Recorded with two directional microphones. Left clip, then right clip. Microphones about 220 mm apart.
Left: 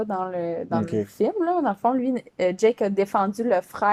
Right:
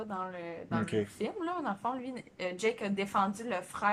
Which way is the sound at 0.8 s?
15° left (ahead or behind).